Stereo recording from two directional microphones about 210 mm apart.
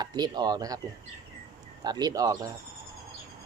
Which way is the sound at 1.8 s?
20° right (ahead or behind).